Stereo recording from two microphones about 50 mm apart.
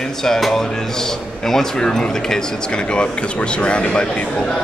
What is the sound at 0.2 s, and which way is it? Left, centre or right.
A man's voice, centre.